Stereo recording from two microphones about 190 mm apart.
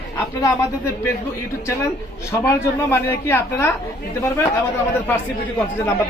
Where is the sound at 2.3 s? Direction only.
15° left (ahead or behind).